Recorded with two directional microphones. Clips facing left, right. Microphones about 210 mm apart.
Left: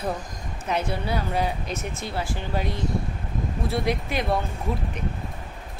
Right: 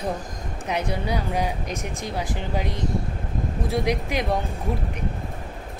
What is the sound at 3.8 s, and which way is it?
Speech, 15° right (ahead or behind).